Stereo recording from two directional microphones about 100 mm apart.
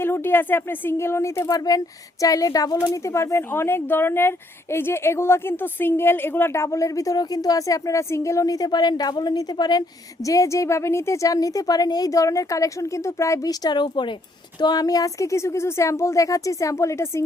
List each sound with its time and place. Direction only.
0.0 s a woman's voice: 20° left (ahead or behind); by 9.8 s 45° left (ahead or behind)
10.2 s a woman's voice: 35° left (ahead or behind)